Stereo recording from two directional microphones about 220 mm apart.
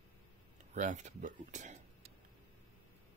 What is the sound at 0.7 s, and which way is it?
Speech, 35° right (ahead or behind).